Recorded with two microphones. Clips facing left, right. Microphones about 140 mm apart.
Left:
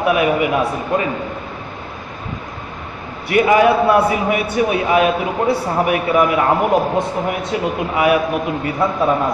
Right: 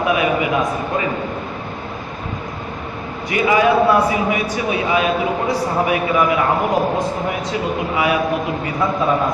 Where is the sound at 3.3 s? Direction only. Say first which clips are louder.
Left 2 dB; 55° left (ahead or behind).